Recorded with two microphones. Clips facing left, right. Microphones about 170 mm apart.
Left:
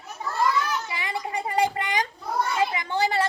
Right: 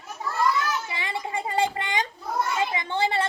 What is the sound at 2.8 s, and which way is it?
Children playing, 25° right (ahead or behind).